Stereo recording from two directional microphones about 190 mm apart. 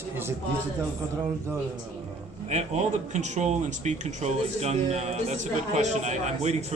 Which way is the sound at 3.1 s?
40° right (ahead or behind).